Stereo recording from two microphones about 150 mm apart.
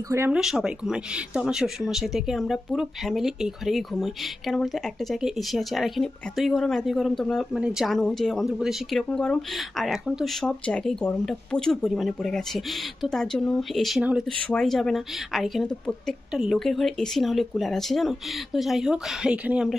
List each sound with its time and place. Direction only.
0.1 s speech: 15° right (ahead or behind)
0.4 s speech: 5° right (ahead or behind)